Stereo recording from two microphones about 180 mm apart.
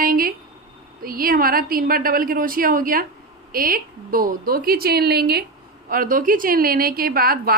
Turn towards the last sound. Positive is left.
turn(degrees=-55)  # may be behind; listen again after turning